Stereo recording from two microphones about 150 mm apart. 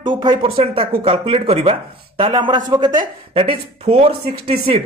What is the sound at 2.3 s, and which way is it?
Speech, 30° right (ahead or behind).